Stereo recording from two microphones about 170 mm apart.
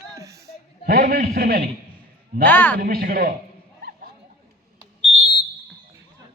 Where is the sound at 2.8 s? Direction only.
60° right (ahead or behind).